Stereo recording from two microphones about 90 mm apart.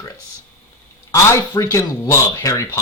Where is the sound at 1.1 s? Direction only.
40° left (ahead or behind).